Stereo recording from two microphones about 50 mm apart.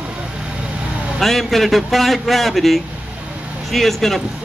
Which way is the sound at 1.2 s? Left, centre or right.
Centre.